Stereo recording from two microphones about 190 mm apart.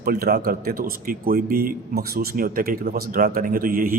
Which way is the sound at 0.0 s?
50° right (ahead or behind).